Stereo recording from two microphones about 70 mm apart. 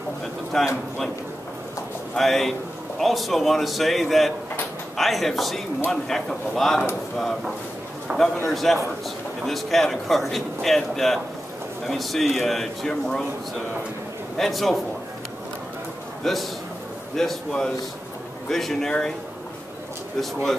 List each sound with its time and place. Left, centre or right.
0.5 s speech: centre
2.1 s speech: centre
8.1 s a man's voice: right
8.5 s speech: centre
14.3 s speech: centre
16.2 s speech: centre